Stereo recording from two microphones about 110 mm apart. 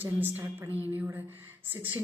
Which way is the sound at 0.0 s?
20° right (ahead or behind).